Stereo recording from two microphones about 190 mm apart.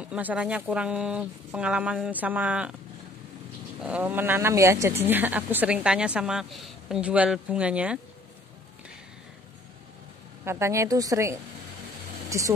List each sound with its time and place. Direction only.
0.0 s a woman's voice: 5° right (ahead or behind)
3.8 s a woman's voice: 10° right (ahead or behind)
10.4 s a woman's voice: 15° right (ahead or behind)